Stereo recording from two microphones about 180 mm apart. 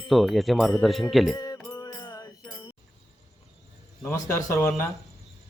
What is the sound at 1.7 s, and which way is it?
Music, 20° left (ahead or behind).